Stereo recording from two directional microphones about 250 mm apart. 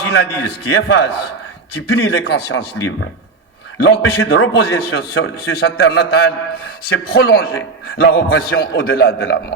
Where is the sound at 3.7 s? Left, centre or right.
Left.